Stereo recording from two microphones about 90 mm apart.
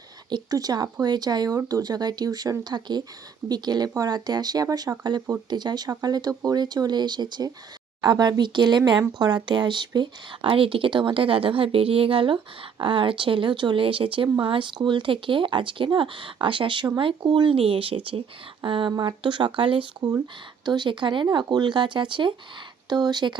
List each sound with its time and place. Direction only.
0.3 s speech: 50° right (ahead or behind); by 18.9 s 70° right (ahead or behind)
18.9 s speech: 55° right (ahead or behind); by 19.9 s 75° right (ahead or behind)
20.7 s speech: 60° right (ahead or behind)
22.9 s speech: 50° right (ahead or behind)